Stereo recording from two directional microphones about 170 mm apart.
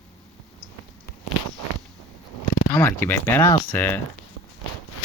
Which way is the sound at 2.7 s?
10° left (ahead or behind).